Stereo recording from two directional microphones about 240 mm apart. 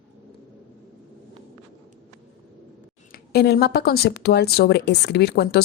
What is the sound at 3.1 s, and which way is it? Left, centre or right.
A woman's voice, left.